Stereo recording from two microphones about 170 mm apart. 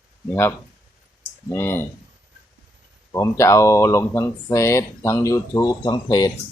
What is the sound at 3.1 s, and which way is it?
Speech, 15° left (ahead or behind).